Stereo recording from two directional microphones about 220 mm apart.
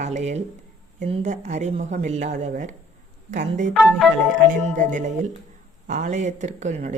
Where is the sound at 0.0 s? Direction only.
30° right (ahead or behind).